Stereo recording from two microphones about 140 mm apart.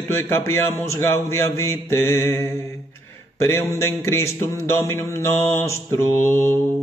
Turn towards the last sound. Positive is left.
turn(degrees=20)  # may be behind; listen again after turning